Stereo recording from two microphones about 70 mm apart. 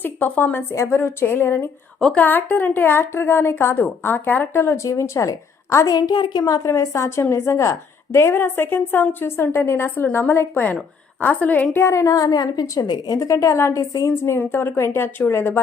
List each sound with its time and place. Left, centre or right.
0.0 s speech: left
0.7 s a woman's voice: left
5.9 s a woman's voice: left
6.4 s a woman's voice: left
6.7 s a woman's voice: left
11.8 s speech: left
12.1 s a woman's voice: left